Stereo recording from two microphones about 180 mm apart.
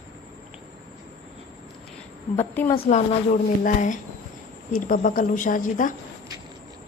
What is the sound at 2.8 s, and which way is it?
A woman's voice, 40° left (ahead or behind).